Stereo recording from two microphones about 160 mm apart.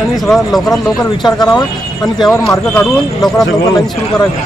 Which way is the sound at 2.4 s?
5° left (ahead or behind).